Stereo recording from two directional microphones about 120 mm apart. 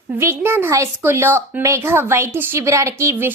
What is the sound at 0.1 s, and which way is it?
Speech, 20° right (ahead or behind).